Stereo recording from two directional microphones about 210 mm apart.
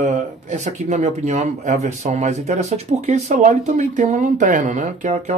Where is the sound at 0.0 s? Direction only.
35° right (ahead or behind).